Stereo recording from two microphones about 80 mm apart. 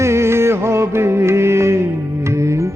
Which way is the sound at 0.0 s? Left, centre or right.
Right.